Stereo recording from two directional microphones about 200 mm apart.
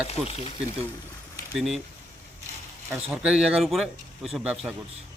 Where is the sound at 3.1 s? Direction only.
5° right (ahead or behind).